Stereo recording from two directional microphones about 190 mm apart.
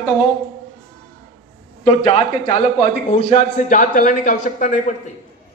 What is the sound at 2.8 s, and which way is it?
A man's voice, 40° left (ahead or behind).